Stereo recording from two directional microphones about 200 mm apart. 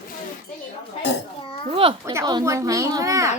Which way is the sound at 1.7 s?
25° right (ahead or behind).